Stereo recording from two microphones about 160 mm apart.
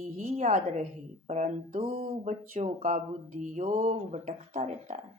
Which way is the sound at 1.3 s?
45° right (ahead or behind).